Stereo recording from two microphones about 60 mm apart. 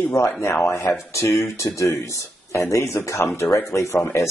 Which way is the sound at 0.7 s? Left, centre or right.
Left.